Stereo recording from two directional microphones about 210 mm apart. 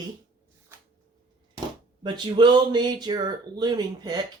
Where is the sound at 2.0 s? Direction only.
20° right (ahead or behind).